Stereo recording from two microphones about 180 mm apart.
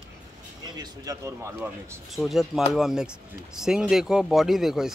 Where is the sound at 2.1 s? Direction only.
Centre (ahead or behind).